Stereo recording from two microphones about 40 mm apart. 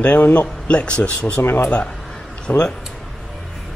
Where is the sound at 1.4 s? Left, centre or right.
Left.